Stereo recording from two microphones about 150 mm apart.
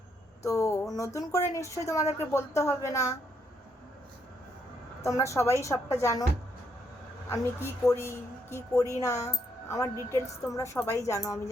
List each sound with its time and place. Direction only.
0.4 s a woman's voice: 20° left (ahead or behind)
5.0 s a woman's voice: 20° left (ahead or behind)
7.3 s a woman's voice: 20° left (ahead or behind)